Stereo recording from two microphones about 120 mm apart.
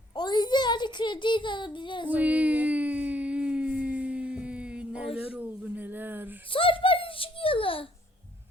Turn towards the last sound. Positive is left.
turn(degrees=50)  # may be behind; listen again after turning